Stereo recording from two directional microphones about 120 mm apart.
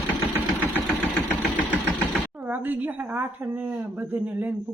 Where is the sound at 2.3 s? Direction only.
15° right (ahead or behind).